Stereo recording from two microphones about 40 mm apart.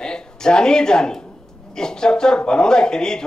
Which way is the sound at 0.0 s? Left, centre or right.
Centre.